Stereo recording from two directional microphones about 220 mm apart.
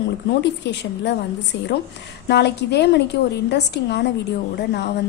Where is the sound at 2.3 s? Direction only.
50° left (ahead or behind).